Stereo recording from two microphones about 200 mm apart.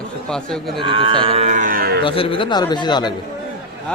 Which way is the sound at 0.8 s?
25° right (ahead or behind).